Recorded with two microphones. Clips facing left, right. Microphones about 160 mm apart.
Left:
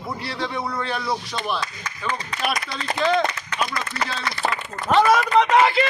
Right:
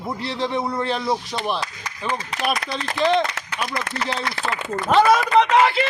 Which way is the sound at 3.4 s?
90° right.